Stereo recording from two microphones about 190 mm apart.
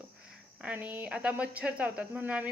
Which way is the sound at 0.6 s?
10° right (ahead or behind).